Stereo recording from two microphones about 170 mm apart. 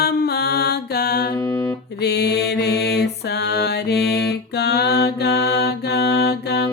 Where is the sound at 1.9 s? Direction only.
75° left (ahead or behind).